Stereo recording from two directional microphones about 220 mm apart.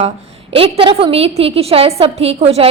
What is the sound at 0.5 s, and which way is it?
A woman's voice, 25° right (ahead or behind).